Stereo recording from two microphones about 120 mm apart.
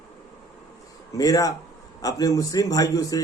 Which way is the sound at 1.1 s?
30° left (ahead or behind).